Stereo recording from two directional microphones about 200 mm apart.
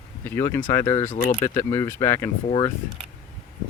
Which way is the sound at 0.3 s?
10° left (ahead or behind).